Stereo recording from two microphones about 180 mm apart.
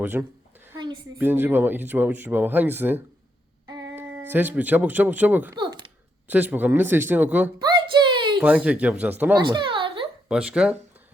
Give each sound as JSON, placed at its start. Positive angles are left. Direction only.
{"t": 0.0, "sound": "a woman's voice", "side_deg": -10}
{"t": 0.8, "sound": "a woman's voice", "side_deg": -25}
{"t": 1.2, "sound": "speech", "side_deg": -10}
{"t": 5.5, "sound": "a sound", "side_deg": -25}
{"t": 6.2, "sound": "speech", "side_deg": -10}
{"t": 7.6, "sound": "a sound", "side_deg": -25}
{"t": 8.4, "sound": "speech", "side_deg": -10}
{"t": 9.5, "sound": "a sound", "side_deg": -25}
{"t": 10.2, "sound": "speech", "side_deg": -5}